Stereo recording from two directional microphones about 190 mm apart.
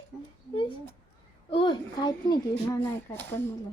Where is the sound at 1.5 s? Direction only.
25° left (ahead or behind).